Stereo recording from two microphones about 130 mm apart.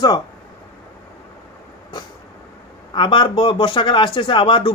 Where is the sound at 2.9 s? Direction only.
35° left (ahead or behind).